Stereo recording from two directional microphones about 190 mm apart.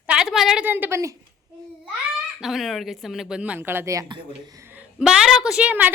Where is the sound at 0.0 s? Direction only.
5° right (ahead or behind).